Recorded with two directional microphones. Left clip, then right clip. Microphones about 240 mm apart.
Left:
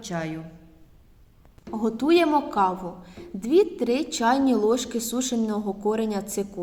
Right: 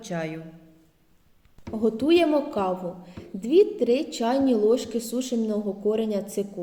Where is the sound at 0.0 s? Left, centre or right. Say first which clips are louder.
Even; left.